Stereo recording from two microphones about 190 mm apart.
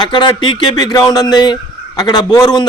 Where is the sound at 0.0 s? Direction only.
25° left (ahead or behind).